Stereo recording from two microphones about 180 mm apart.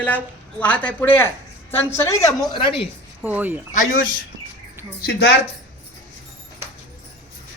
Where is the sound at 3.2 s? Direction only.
10° right (ahead or behind).